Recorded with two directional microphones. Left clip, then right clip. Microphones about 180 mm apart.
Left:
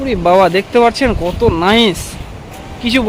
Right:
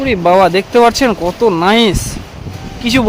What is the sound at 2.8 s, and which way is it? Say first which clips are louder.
Speech: right 1 dB; 15° right (ahead or behind).